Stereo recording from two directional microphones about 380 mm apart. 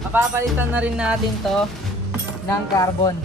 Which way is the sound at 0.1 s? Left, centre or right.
Centre.